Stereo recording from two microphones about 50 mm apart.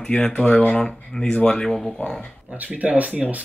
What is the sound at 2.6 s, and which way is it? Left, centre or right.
Speech, right.